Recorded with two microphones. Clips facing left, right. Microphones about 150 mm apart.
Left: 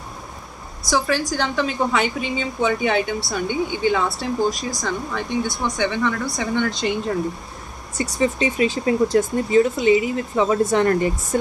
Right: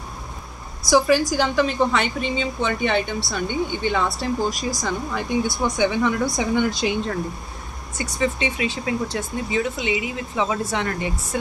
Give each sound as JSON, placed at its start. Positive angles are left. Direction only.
{"t": 0.8, "sound": "a woman's voice", "side_deg": -10}
{"t": 8.0, "sound": "speech", "side_deg": 35}